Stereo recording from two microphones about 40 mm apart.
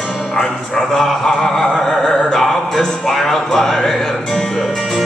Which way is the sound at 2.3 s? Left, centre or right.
Centre.